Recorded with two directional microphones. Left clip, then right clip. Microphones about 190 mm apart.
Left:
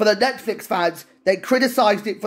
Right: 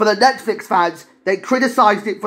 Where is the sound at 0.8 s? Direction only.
45° left (ahead or behind).